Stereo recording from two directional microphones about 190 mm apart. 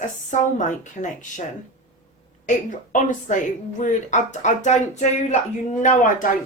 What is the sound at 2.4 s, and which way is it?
Speech, 40° left (ahead or behind).